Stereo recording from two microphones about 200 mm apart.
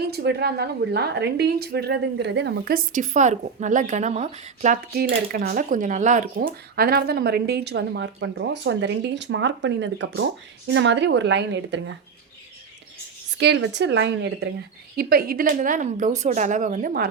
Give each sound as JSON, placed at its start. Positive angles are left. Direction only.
{"t": 0.0, "sound": "a woman's voice", "side_deg": -50}
{"t": 13.4, "sound": "speech", "side_deg": -60}
{"t": 14.9, "sound": "a woman's voice", "side_deg": -50}